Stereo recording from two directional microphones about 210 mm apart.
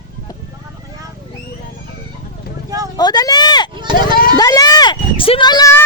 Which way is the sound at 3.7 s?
20° right (ahead or behind).